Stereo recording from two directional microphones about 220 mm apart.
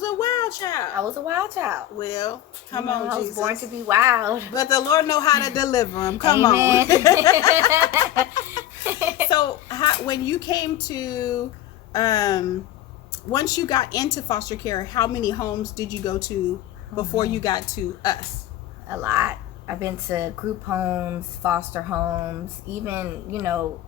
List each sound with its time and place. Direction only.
0.0 s a sound: 15° left (ahead or behind)
0.9 s speech: 10° right (ahead or behind)
2.0 s a woman's voice: 15° left (ahead or behind)
3.1 s speech: 10° right (ahead or behind)
4.5 s a woman's voice: 15° left (ahead or behind)
6.5 s speech: 10° right (ahead or behind)
6.8 s a woman's voice: 15° left (ahead or behind)
7.9 s speech: 10° right (ahead or behind)
8.8 s a sound: 10° right (ahead or behind)
9.3 s a woman's voice: 20° left (ahead or behind)
18.9 s speech: 10° right (ahead or behind)